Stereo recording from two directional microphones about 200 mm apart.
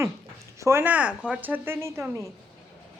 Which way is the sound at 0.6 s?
15° right (ahead or behind).